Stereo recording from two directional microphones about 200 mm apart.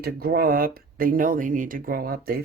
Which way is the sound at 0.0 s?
50° right (ahead or behind).